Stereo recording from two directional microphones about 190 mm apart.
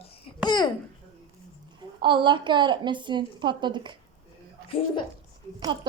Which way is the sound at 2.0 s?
25° right (ahead or behind).